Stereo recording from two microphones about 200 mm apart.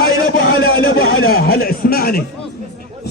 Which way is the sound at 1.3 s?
50° left (ahead or behind).